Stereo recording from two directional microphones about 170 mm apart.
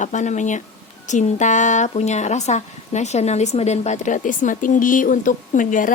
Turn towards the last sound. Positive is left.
turn(degrees=50)  # may be behind; listen again after turning